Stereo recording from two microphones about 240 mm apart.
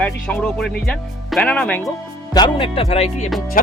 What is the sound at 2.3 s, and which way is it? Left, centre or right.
Speech, centre.